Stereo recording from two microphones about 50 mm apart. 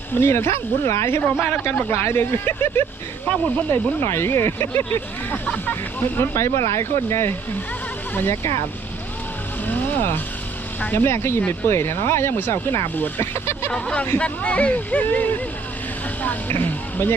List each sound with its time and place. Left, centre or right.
0.2 s speech: left
1.0 s speech: left
5.5 s speech: left
6.1 s speech: left
9.6 s music: left
10.9 s speech: left
13.7 s speech: left
16.5 s speech: left